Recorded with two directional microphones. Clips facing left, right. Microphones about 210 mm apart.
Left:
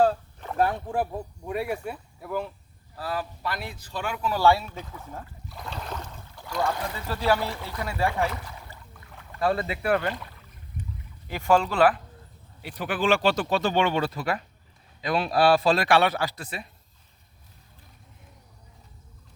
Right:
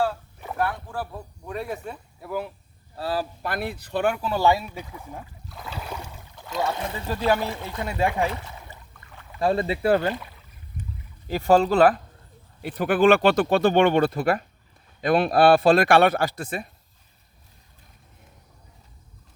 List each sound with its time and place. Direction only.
0.7 s speech: 20° left (ahead or behind)
1.5 s speech: 10° left (ahead or behind)
2.9 s speech: 30° right (ahead or behind)
3.4 s speech: 55° right (ahead or behind)
4.2 s speech: 25° right (ahead or behind)
9.0 s rowboat: centre (ahead or behind)
9.4 s speech: 25° right (ahead or behind)
11.3 s speech: 35° right (ahead or behind)
12.6 s speech: 50° right (ahead or behind)